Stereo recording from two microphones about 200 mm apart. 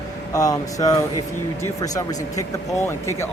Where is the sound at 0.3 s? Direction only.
15° left (ahead or behind).